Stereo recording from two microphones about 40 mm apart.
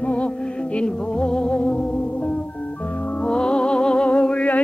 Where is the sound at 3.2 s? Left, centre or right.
Left.